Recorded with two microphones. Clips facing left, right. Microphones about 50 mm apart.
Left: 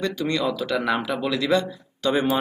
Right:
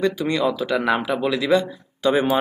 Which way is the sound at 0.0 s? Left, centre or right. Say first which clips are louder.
Right 4 dB; centre.